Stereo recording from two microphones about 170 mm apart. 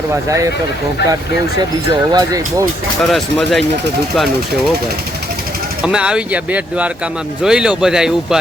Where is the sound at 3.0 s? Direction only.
Centre (ahead or behind).